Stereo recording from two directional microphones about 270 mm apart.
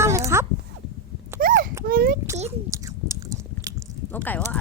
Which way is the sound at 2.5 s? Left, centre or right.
Centre.